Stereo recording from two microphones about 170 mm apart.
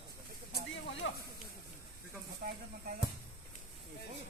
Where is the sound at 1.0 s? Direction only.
90° left.